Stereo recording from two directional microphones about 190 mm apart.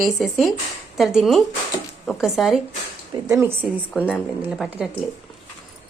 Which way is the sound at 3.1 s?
15° right (ahead or behind).